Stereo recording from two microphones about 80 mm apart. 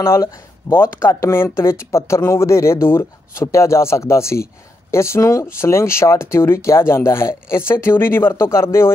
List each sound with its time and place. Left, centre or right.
0.0 s speech: left